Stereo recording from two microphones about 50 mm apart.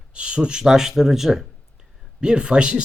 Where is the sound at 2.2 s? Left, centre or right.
Centre.